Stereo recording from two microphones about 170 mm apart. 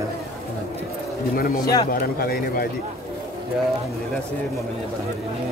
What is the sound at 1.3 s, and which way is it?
Speech, 60° left (ahead or behind).